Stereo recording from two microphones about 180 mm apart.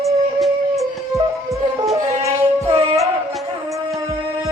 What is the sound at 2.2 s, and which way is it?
Music, 15° right (ahead or behind).